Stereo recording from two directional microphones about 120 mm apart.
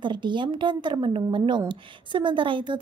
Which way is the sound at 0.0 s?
40° right (ahead or behind).